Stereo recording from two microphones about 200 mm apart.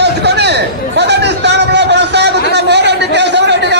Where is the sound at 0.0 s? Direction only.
55° right (ahead or behind).